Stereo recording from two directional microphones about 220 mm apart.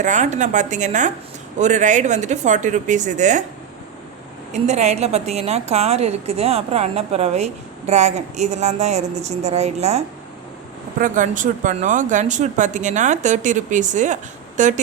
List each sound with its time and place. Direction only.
0.0 s speech: 35° right (ahead or behind)
4.5 s a woman's voice: 30° right (ahead or behind)
11.0 s speech: 35° right (ahead or behind)